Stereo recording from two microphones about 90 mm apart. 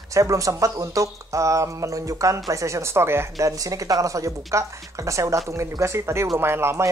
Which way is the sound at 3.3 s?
40° right (ahead or behind).